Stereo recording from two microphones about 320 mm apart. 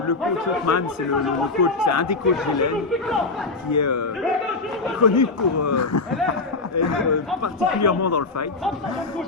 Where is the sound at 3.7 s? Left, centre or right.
Left.